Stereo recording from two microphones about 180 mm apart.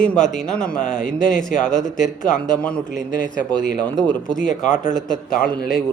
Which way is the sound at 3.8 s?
5° left (ahead or behind).